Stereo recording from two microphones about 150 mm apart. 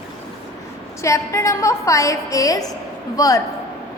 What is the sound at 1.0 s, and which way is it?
A woman's voice, 20° left (ahead or behind).